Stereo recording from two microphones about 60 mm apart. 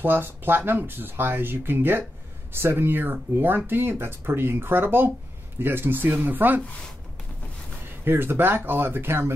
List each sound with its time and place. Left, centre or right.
0.0 s speech: right
8.0 s speech: right